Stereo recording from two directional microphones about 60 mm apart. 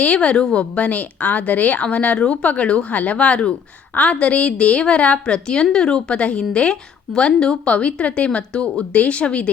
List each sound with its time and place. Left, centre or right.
0.0 s a woman's voice: centre